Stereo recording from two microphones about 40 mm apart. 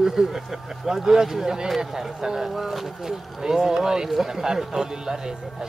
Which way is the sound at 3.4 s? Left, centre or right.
Centre.